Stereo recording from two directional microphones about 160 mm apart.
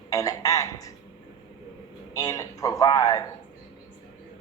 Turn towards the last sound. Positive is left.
turn(degrees=20)  # may be behind; listen again after turning